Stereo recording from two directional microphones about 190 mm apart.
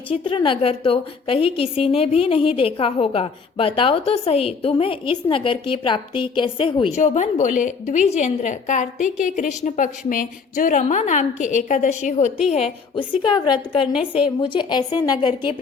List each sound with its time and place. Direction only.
0.1 s a woman's voice: 25° left (ahead or behind)
13.0 s a woman's voice: 25° left (ahead or behind)